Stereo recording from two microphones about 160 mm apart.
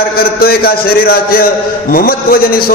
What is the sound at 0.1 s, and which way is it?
A man's voice, 70° left (ahead or behind).